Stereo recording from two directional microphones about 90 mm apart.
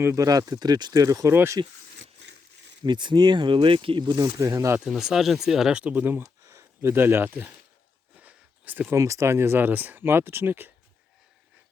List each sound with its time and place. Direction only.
0.0 s speech: 35° right (ahead or behind)
1.3 s speech: 25° right (ahead or behind)
2.8 s speech: 60° right (ahead or behind); by 4.0 s 80° right
4.0 s speech: 50° right (ahead or behind)
4.4 s speech: 35° right (ahead or behind)
4.9 s speech: 5° right (ahead or behind); by 6.2 s 20° right (ahead or behind)
6.2 s speech: 35° right (ahead or behind); by 7.5 s 20° right (ahead or behind)
8.1 s a sound: 15° right (ahead or behind)
9.0 s speech: 35° right (ahead or behind)